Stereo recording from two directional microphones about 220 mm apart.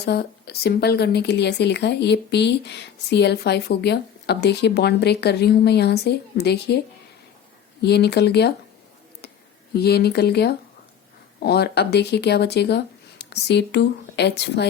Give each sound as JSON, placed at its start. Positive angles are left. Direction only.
{"t": 0.0, "sound": "speech", "side_deg": 50}
{"t": 9.7, "sound": "speech", "side_deg": 45}